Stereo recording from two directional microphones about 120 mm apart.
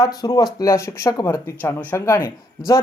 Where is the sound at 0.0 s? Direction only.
35° left (ahead or behind).